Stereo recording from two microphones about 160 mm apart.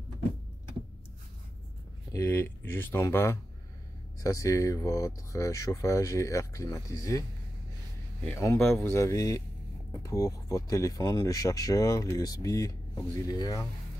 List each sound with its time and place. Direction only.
2.1 s speech: 15° left (ahead or behind)
8.3 s speech: 15° left (ahead or behind)